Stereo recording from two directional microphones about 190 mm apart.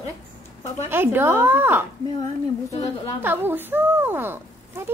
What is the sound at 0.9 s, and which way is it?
Speech, 10° right (ahead or behind).